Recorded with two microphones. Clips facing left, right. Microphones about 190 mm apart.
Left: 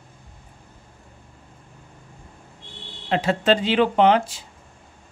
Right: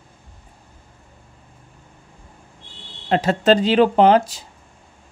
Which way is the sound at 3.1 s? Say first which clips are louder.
Right 4 dB; 40° right (ahead or behind).